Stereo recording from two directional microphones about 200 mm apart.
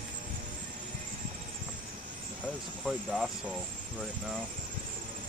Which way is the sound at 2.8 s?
5° right (ahead or behind).